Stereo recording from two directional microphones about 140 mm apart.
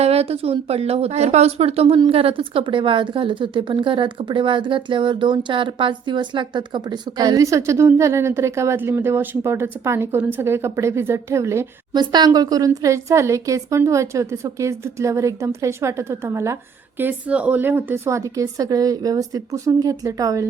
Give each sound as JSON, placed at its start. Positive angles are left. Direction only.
{"t": 0.0, "sound": "a woman's voice", "side_deg": -45}